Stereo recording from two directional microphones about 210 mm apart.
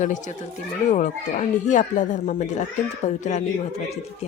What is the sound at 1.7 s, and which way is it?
Speech, 35° left (ahead or behind).